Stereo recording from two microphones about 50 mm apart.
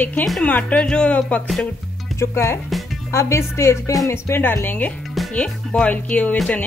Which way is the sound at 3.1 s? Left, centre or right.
Left.